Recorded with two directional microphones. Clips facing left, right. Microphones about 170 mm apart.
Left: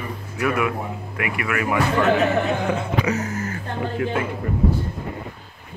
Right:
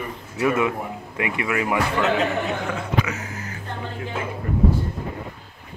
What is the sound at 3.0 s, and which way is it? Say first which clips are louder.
Music: left 7 dB; 40° left (ahead or behind).